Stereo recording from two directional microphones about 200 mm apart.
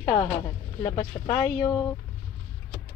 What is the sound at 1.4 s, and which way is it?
Speech, 10° left (ahead or behind).